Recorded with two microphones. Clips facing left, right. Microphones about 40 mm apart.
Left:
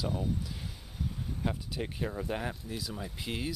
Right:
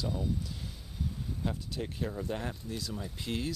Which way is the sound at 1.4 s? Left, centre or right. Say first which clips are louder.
Left 1 dB; centre.